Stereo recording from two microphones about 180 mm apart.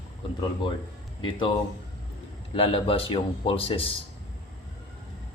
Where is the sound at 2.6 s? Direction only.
30° left (ahead or behind).